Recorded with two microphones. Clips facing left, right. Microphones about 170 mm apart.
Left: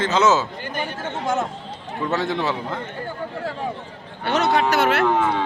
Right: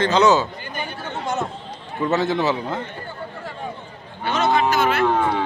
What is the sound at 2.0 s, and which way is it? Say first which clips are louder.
Speech: right 3 dB; centre (ahead or behind).